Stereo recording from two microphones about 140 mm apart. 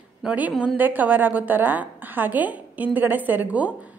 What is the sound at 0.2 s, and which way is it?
A woman's voice, 10° right (ahead or behind).